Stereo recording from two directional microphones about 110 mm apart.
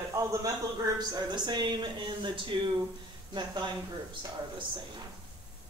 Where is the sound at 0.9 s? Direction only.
40° right (ahead or behind).